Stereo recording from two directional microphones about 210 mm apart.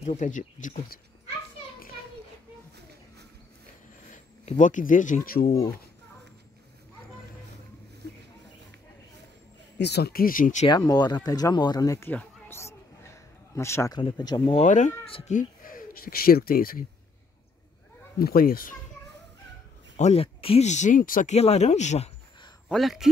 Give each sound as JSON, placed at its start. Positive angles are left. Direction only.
{"t": 0.0, "sound": "speech", "side_deg": 35}
{"t": 4.1, "sound": "speech", "side_deg": 35}
{"t": 8.0, "sound": "a sound", "side_deg": -50}
{"t": 9.8, "sound": "speech", "side_deg": 50}
{"t": 10.7, "sound": "speech", "side_deg": 20}
{"t": 14.6, "sound": "speech", "side_deg": 35}
{"t": 18.2, "sound": "speech", "side_deg": 45}
{"t": 20.0, "sound": "speech", "side_deg": 30}
{"t": 22.7, "sound": "speech", "side_deg": 0}